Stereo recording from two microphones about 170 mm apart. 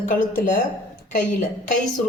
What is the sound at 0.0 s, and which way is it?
A woman's voice, 50° left (ahead or behind).